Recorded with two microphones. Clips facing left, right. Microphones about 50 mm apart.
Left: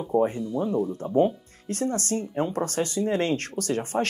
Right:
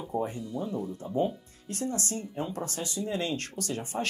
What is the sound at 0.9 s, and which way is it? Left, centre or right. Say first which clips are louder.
Speech: left 5 dB; left.